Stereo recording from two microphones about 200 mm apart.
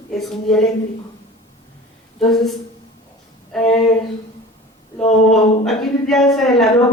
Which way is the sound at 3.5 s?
Centre (ahead or behind).